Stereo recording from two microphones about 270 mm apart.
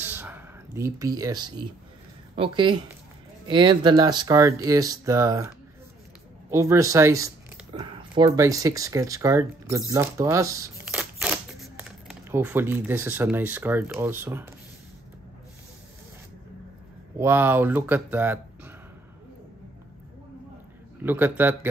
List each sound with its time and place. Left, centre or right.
0.0 s a sound: centre
2.3 s speech: centre
6.5 s speech: centre
17.2 s speech: centre
21.0 s speech: centre